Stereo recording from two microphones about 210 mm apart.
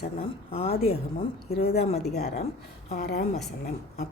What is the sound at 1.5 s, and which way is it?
Speech, 50° left (ahead or behind).